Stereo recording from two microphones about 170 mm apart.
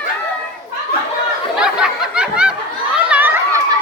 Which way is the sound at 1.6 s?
5° right (ahead or behind).